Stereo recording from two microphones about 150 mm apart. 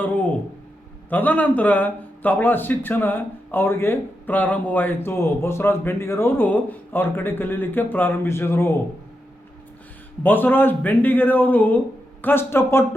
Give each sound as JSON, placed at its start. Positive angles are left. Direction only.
{"t": 0.0, "sound": "a sound", "side_deg": 10}
{"t": 1.1, "sound": "a man's voice", "side_deg": 10}
{"t": 10.2, "sound": "a man's voice", "side_deg": 15}